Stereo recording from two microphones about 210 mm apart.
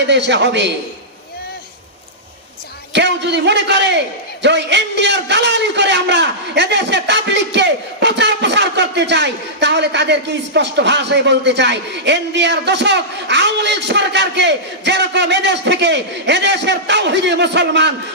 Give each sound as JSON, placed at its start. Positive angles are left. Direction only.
{"t": 0.1, "sound": "a man's voice", "side_deg": -55}
{"t": 2.9, "sound": "a man's voice", "side_deg": -55}